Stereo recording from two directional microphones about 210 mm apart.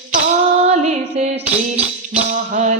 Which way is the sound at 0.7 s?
35° right (ahead or behind).